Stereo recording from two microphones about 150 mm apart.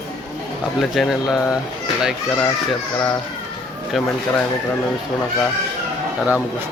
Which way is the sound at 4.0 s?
Centre (ahead or behind).